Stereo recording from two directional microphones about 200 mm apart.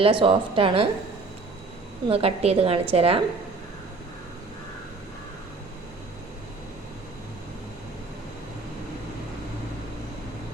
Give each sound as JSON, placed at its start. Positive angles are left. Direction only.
{"t": 0.0, "sound": "a woman's voice", "side_deg": -25}
{"t": 2.0, "sound": "a woman's voice", "side_deg": -30}